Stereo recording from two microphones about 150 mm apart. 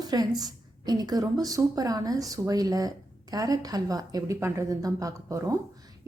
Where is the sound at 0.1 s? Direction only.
25° right (ahead or behind).